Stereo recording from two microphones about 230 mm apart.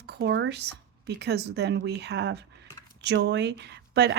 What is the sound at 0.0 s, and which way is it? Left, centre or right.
Speech, right.